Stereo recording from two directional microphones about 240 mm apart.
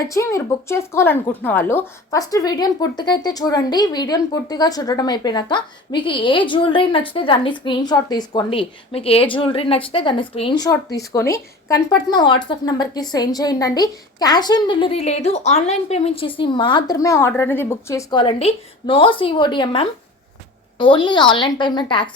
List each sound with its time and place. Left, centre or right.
0.1 s a woman's voice: centre